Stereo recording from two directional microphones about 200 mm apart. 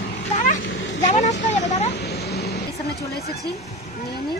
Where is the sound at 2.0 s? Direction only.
55° left (ahead or behind).